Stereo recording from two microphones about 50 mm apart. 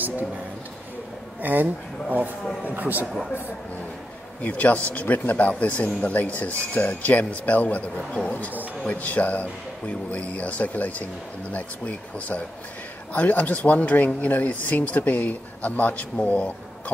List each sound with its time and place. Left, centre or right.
1.4 s speech: right
4.4 s speech: left
8.3 s speech: left